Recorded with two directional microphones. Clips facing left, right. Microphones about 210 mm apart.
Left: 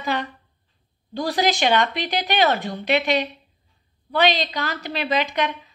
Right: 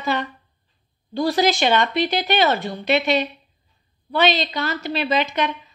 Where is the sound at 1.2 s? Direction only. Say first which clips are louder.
Right 3 dB; 15° left (ahead or behind).